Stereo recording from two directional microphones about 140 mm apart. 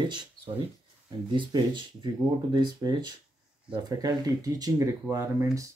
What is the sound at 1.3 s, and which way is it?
Speech, 35° right (ahead or behind).